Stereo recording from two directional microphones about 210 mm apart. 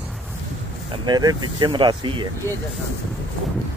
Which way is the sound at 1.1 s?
20° right (ahead or behind).